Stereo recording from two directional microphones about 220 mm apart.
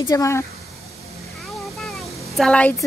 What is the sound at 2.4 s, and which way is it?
Speech, 5° left (ahead or behind).